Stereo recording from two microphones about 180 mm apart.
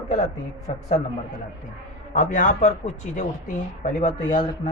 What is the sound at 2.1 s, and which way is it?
Speech, 45° left (ahead or behind).